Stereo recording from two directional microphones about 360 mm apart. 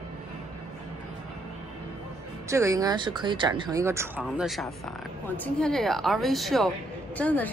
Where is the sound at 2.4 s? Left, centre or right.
Centre.